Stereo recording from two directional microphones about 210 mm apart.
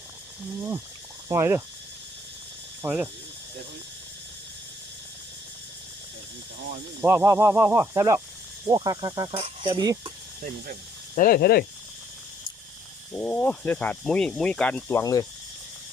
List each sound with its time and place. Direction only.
1.3 s speech: 10° right (ahead or behind)
2.8 s speech: 10° right (ahead or behind)
7.0 s speech: 10° right (ahead or behind)
11.1 s speech: 40° left (ahead or behind)
13.1 s speech: 10° left (ahead or behind)